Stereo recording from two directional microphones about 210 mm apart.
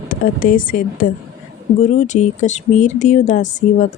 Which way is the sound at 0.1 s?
40° left (ahead or behind).